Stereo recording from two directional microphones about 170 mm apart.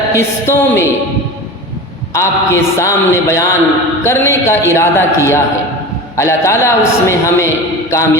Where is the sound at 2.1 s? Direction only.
15° left (ahead or behind).